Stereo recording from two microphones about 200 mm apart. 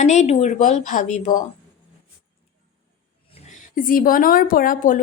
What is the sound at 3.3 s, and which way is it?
A woman's voice, 40° left (ahead or behind).